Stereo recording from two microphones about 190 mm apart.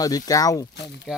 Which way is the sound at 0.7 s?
65° left (ahead or behind).